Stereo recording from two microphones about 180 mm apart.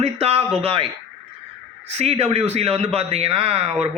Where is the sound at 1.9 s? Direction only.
35° right (ahead or behind).